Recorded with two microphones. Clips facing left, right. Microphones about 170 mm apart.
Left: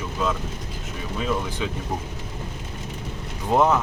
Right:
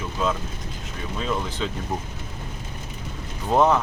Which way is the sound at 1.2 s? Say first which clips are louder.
Left 1 dB; 10° left (ahead or behind).